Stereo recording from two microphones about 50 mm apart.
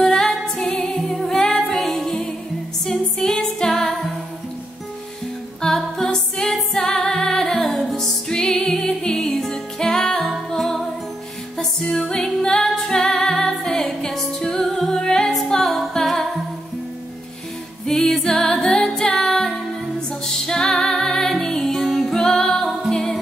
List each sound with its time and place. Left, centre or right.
0.0 s music: centre
5.6 s music: centre
6.1 s music: centre
17.8 s music: centre